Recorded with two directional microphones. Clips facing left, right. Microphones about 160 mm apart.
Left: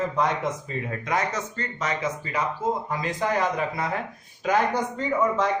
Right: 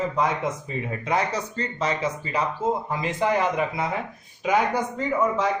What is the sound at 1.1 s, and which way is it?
A man's voice, 30° right (ahead or behind).